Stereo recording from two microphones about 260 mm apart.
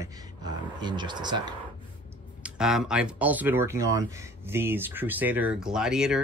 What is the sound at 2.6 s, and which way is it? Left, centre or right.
Speech, centre.